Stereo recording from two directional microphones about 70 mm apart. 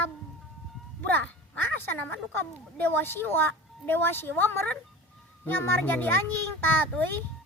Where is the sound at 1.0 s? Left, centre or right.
Left.